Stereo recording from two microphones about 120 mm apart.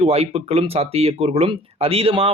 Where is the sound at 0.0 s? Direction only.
60° right (ahead or behind).